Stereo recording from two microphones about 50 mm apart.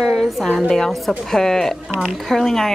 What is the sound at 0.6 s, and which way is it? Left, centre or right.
A woman's voice, centre.